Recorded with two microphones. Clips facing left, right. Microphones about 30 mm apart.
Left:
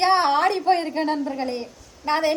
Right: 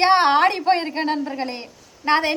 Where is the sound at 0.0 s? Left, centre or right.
Right.